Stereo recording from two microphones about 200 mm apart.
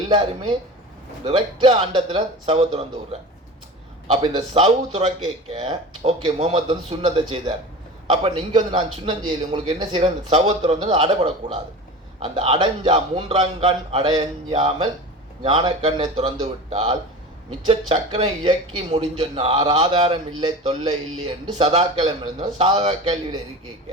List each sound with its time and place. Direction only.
1.2 s a man's voice: 30° right (ahead or behind)